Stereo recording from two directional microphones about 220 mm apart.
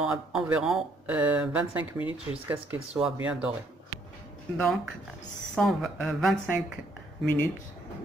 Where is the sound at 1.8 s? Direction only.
25° left (ahead or behind).